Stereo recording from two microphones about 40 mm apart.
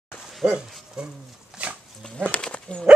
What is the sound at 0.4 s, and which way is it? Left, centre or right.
Speech, centre.